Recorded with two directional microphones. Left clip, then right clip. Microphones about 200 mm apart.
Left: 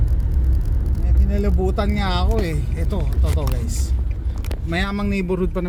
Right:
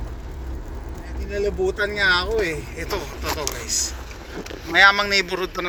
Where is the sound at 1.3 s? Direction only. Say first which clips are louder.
Right 1 dB; 20° left (ahead or behind).